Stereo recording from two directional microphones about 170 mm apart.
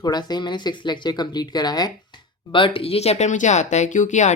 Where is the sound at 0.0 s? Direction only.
25° left (ahead or behind).